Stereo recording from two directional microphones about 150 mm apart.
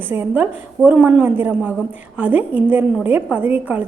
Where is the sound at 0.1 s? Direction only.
10° right (ahead or behind).